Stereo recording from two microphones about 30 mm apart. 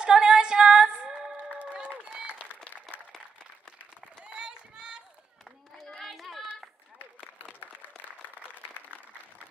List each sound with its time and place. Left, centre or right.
0.0 s music: right
4.2 s run: right
5.9 s a sound: centre
7.6 s applause: left